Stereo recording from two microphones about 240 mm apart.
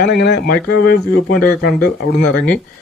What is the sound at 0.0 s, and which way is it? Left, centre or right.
Speech, left.